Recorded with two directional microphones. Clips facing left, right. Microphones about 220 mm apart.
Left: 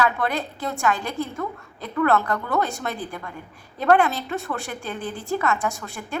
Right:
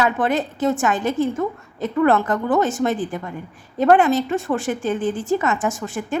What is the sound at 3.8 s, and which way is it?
Speech, 15° right (ahead or behind).